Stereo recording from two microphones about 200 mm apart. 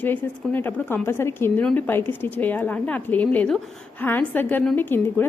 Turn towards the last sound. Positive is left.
turn(degrees=10)  # may be behind; listen again after turning